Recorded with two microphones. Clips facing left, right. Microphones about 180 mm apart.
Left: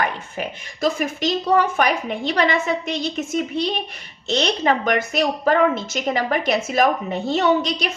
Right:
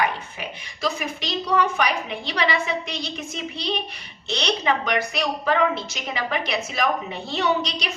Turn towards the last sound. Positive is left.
turn(degrees=50)  # may be behind; listen again after turning